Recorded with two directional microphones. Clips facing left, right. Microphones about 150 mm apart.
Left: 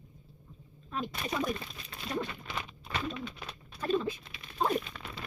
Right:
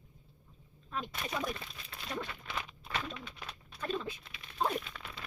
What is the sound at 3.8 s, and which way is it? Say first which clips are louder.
Patter: left 7 dB; 35° left (ahead or behind).